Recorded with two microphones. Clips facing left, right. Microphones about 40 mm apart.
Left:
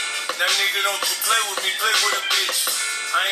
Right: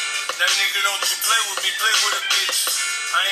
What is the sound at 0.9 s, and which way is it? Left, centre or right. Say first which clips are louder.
Music: right 1 dB; right.